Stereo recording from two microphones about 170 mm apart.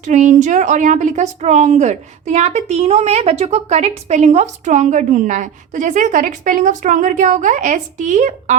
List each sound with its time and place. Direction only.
0.0 s a woman's voice: 45° right (ahead or behind)